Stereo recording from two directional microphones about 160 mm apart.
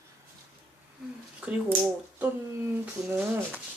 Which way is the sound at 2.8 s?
10° right (ahead or behind).